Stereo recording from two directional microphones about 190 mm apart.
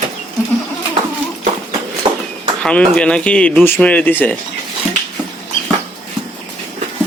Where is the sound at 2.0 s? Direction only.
30° right (ahead or behind).